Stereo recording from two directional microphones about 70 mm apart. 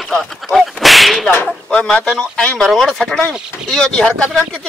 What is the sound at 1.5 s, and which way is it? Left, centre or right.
A man's voice, centre.